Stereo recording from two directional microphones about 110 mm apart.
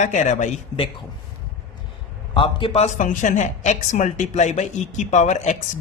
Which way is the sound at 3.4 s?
90° left.